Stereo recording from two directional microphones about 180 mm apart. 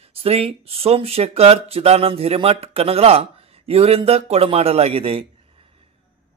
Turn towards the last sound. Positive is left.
turn(degrees=-30)  # may be behind; listen again after turning